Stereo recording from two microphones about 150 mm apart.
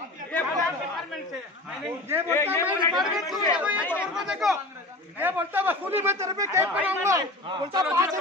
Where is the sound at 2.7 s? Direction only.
Centre (ahead or behind).